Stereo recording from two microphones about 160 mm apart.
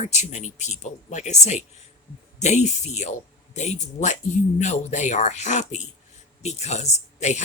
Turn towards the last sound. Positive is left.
turn(degrees=45)  # may be behind; listen again after turning